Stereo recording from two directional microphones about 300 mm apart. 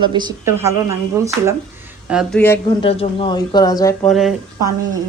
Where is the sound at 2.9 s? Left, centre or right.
Centre.